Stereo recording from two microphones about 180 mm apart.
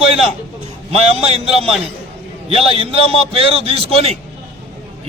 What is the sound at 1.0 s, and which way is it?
A man's voice, 35° right (ahead or behind).